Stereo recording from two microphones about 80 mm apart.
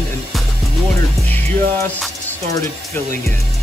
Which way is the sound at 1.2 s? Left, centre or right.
Left.